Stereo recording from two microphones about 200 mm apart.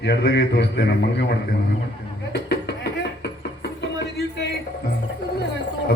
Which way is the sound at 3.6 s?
60° left (ahead or behind).